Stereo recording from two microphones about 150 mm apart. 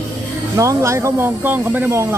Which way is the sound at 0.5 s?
20° right (ahead or behind).